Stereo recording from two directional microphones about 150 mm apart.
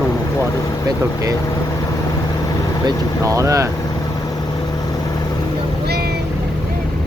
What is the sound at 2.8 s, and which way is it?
Speech, 20° right (ahead or behind).